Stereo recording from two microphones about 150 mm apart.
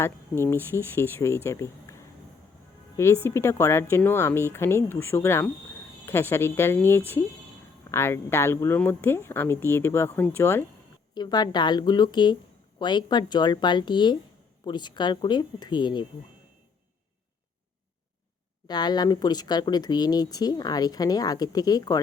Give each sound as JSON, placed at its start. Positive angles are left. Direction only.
{"t": 0.0, "sound": "speech", "side_deg": 15}
{"t": 11.1, "sound": "speech", "side_deg": 30}
{"t": 18.7, "sound": "speech", "side_deg": 30}